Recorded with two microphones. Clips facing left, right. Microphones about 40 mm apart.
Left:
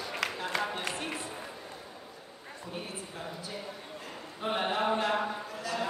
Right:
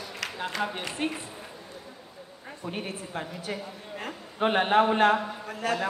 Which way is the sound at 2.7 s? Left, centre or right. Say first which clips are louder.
Right 6 dB; right.